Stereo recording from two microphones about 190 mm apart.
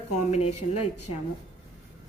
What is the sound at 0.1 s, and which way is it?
Speech, 35° left (ahead or behind).